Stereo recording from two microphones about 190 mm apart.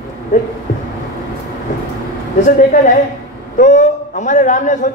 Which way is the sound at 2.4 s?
45° left (ahead or behind).